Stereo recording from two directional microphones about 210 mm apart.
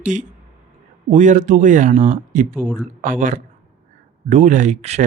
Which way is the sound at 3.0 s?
40° right (ahead or behind).